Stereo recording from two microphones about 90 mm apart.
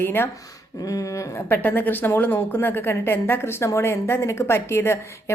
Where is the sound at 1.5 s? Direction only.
20° left (ahead or behind).